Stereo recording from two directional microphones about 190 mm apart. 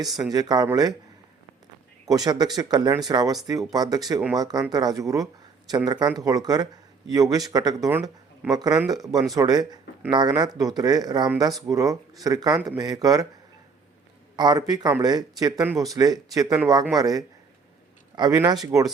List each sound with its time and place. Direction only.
0.2 s speech: 20° right (ahead or behind)
2.0 s speech: 20° right (ahead or behind)
8.5 s speech: 20° right (ahead or behind)
14.3 s speech: 20° right (ahead or behind)